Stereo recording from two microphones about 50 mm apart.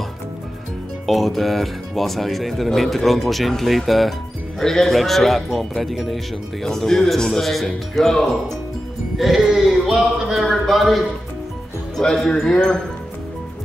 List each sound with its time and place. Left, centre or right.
1.0 s speech: centre
9.2 s speech: centre
12.0 s speech: centre